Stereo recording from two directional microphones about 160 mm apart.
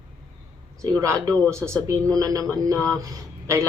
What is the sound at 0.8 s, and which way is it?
Speech, 20° right (ahead or behind).